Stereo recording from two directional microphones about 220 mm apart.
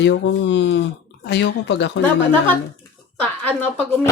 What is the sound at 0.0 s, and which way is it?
Speech, 55° left (ahead or behind).